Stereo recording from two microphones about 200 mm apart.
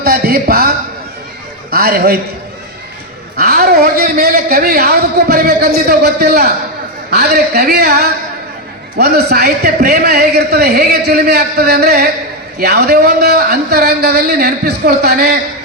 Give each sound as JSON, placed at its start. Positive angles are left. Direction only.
{"t": 0.0, "sound": "a man's voice", "side_deg": -50}
{"t": 1.7, "sound": "a man's voice", "side_deg": -50}
{"t": 3.3, "sound": "a man's voice", "side_deg": -50}